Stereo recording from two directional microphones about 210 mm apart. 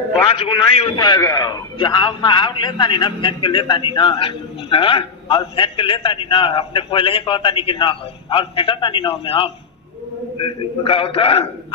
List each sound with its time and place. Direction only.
0.3 s a man's voice: 25° left (ahead or behind)